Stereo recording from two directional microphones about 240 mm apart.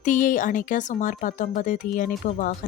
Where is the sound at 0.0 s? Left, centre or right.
Left.